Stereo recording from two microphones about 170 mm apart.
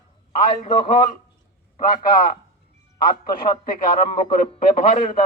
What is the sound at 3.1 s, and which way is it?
Speech, 25° left (ahead or behind).